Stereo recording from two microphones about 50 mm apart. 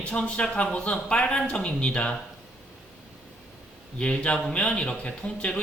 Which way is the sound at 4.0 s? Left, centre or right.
Left.